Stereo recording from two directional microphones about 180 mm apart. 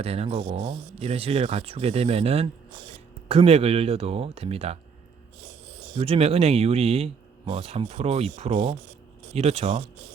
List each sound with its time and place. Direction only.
0.0 s speech: 35° right (ahead or behind)
6.0 s speech: 35° right (ahead or behind)